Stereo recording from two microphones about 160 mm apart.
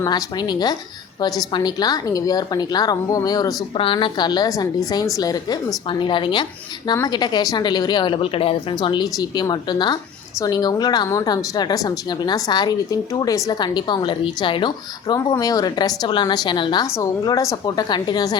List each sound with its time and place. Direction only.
0.0 s a woman's voice: 25° left (ahead or behind)